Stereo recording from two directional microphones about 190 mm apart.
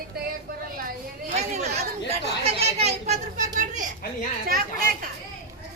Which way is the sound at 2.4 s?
35° right (ahead or behind).